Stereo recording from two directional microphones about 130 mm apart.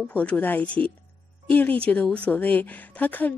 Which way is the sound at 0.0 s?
10° left (ahead or behind).